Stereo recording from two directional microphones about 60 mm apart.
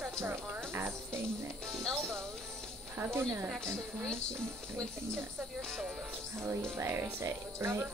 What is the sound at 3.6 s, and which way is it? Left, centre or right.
Speech, centre.